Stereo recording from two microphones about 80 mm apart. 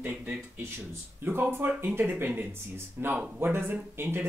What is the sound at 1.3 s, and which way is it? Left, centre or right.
Speech, right.